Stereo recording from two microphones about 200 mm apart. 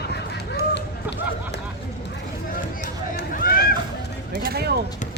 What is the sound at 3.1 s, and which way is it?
Run, 45° left (ahead or behind).